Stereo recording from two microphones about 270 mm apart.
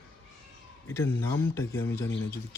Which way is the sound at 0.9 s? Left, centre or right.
Centre.